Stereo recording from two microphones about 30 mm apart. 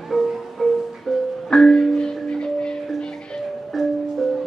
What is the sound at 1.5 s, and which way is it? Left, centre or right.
Music, centre.